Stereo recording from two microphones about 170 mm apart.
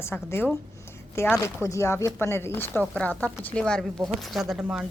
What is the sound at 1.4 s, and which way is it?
A woman's voice, 15° left (ahead or behind).